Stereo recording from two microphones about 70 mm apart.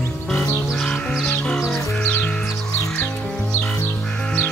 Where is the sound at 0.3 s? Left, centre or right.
Centre.